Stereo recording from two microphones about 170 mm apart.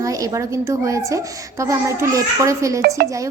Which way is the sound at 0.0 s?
20° right (ahead or behind).